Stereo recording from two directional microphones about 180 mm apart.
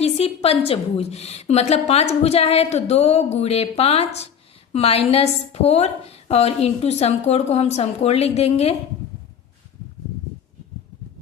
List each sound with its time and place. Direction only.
0.0 s a woman's voice: 35° left (ahead or behind)